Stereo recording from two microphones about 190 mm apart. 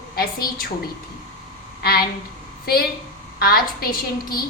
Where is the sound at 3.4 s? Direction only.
50° left (ahead or behind).